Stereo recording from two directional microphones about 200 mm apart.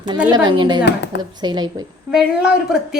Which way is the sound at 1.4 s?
20° right (ahead or behind).